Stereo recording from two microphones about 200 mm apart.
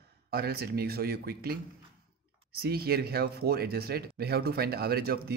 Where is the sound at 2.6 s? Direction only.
50° right (ahead or behind).